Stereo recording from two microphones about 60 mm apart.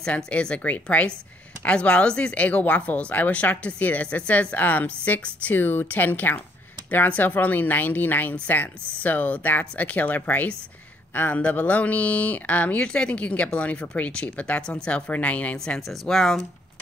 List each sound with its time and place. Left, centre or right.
0.0 s speech: centre
15.5 s speech: centre